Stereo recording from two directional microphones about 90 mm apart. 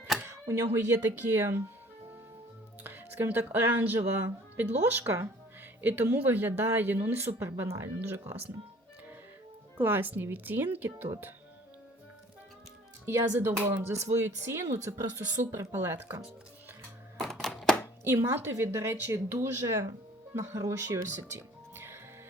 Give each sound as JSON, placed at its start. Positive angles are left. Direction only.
{"t": 0.2, "sound": "speech", "side_deg": -30}
{"t": 2.8, "sound": "speech", "side_deg": -20}
{"t": 9.7, "sound": "speech", "side_deg": -20}
{"t": 13.1, "sound": "speech", "side_deg": -30}
{"t": 17.4, "sound": "chopping", "side_deg": 5}
{"t": 18.0, "sound": "speech", "side_deg": -25}